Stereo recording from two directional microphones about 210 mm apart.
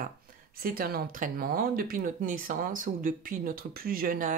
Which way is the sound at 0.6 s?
45° right (ahead or behind).